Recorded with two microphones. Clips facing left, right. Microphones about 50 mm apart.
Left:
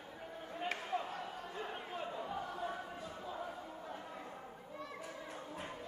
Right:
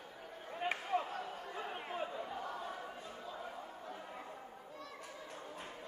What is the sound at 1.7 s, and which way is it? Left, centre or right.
Chatter, right.